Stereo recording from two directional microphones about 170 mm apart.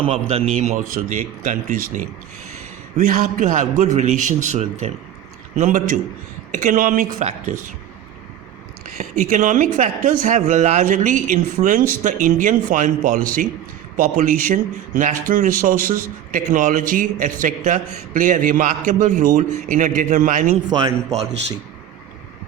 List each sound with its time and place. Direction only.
0.0 s a man's voice: 35° right (ahead or behind); by 7.1 s 50° right (ahead or behind)
7.2 s a man's voice: 40° right (ahead or behind)
9.0 s speech: 45° right (ahead or behind)